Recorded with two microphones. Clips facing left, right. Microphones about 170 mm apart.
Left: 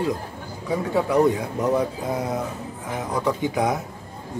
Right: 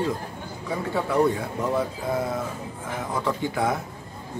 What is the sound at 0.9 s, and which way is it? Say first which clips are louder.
Speech: left 3 dB; 15° left (ahead or behind).